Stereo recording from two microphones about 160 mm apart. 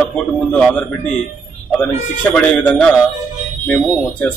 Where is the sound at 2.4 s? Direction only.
10° left (ahead or behind).